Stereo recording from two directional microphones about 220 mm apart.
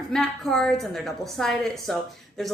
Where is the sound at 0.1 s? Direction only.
Centre (ahead or behind).